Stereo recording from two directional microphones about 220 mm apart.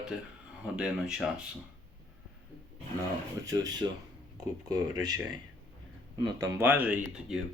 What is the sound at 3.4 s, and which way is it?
Speech, 15° right (ahead or behind).